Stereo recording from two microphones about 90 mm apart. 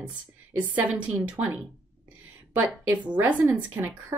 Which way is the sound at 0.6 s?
20° right (ahead or behind).